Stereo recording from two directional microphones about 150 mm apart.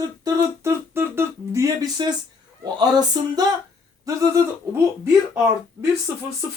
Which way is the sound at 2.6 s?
25° right (ahead or behind).